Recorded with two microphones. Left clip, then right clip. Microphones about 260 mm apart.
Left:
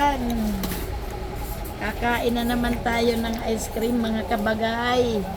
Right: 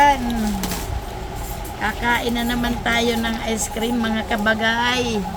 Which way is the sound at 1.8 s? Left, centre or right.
Centre.